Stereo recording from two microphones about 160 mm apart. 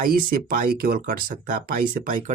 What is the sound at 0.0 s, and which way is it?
Speech, 65° right (ahead or behind).